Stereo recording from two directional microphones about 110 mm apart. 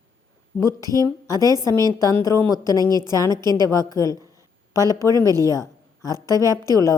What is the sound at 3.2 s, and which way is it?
Speech, 30° left (ahead or behind).